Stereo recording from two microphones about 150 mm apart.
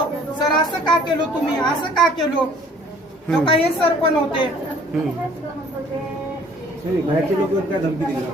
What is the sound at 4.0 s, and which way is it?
Speech, 35° left (ahead or behind).